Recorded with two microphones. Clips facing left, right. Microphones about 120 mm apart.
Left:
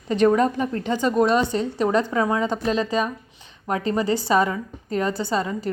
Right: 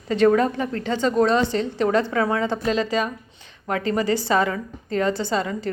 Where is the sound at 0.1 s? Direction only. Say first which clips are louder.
Even; 20° left (ahead or behind).